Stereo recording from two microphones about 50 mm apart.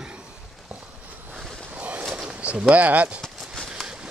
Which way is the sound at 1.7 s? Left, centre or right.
Right.